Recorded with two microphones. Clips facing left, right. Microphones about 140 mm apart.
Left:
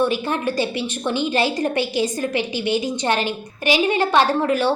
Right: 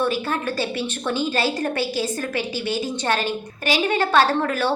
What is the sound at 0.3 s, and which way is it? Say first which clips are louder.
A woman's voice: left 3 dB; 15° left (ahead or behind).